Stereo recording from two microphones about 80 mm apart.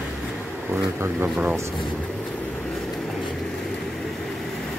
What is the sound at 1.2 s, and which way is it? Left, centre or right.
Speech, centre.